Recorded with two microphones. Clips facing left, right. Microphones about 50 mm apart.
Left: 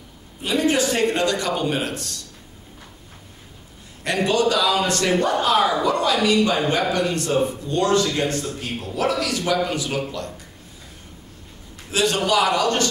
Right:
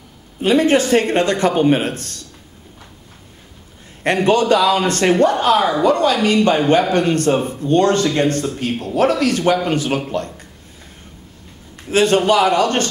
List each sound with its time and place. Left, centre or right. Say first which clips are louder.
0.4 s speech: right 6 dB; right
4.0 s a man's voice: right 5 dB; right
11.9 s speech: right 6 dB; right